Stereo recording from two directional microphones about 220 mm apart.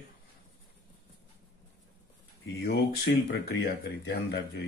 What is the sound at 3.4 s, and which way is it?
Speech, 45° left (ahead or behind).